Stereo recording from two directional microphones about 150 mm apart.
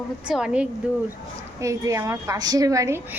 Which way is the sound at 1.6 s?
20° right (ahead or behind).